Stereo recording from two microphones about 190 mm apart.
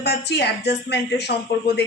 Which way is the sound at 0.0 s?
60° left (ahead or behind).